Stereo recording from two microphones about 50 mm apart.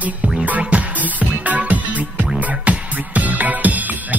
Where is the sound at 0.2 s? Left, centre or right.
Centre.